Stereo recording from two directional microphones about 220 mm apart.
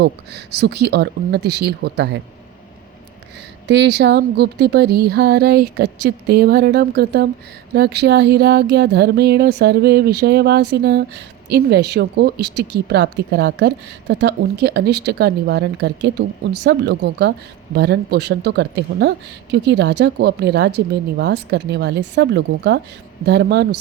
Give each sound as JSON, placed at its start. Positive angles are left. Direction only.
{"t": 0.0, "sound": "speech", "side_deg": -50}
{"t": 3.7, "sound": "speech", "side_deg": -50}